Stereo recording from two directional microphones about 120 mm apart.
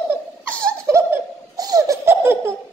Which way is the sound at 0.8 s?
25° right (ahead or behind).